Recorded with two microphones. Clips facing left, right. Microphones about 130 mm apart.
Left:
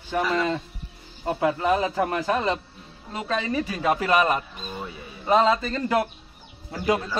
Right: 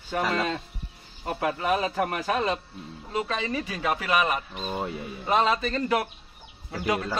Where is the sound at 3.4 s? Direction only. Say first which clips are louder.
Left 3 dB; 30° left (ahead or behind).